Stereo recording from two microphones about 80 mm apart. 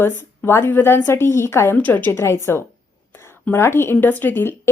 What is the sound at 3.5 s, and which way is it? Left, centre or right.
A woman's voice, left.